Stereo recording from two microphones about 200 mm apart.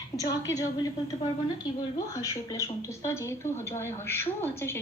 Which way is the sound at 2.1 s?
15° left (ahead or behind).